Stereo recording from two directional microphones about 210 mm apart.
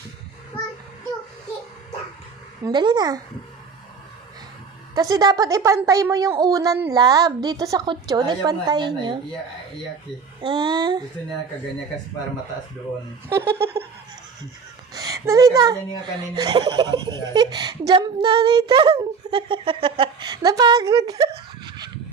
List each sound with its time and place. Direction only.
2.6 s speech: 20° right (ahead or behind)
4.9 s a woman's voice: 15° right (ahead or behind)
10.4 s speech: 20° right (ahead or behind)
13.2 s a woman's voice: 10° right (ahead or behind)
14.9 s a woman's voice: 15° right (ahead or behind)